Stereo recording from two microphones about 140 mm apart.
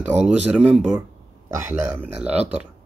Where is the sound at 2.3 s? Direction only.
45° right (ahead or behind).